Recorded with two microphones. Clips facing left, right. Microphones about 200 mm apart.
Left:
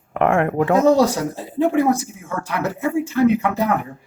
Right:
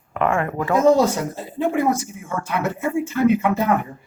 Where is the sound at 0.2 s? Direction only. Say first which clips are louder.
Left 4 dB; 55° left (ahead or behind).